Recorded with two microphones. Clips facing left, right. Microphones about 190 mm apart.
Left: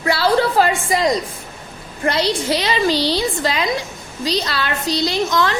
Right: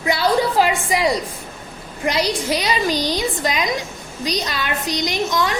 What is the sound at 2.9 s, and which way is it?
Speech, 30° left (ahead or behind).